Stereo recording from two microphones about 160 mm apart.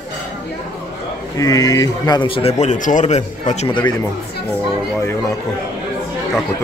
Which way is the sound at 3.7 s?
30° left (ahead or behind).